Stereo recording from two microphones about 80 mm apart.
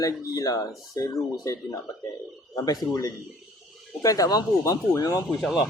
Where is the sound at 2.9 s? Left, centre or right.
Left.